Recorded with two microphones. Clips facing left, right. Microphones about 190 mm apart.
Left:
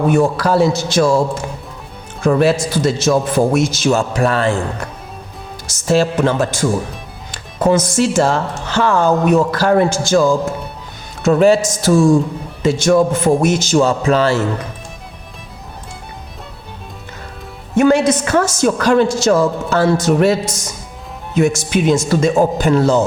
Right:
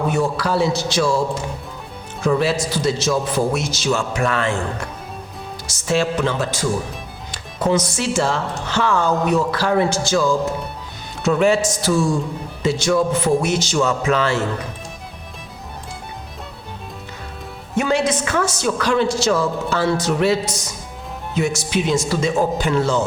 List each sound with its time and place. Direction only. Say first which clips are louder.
0.1 s speech: left 6 dB; 50° left (ahead or behind)
2.2 s speech: left 5 dB; 50° left (ahead or behind)
4.1 s a man's voice: left 5 dB; 35° left (ahead or behind)
5.6 s speech: left 5 dB; 45° left (ahead or behind)
17.7 s speech: left 7 dB; 45° left (ahead or behind)